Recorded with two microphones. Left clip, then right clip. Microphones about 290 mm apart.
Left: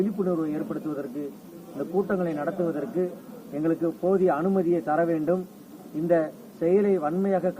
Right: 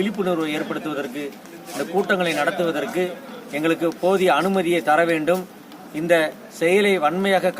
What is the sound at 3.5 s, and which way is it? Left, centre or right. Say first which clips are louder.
Speech: right 5 dB; centre.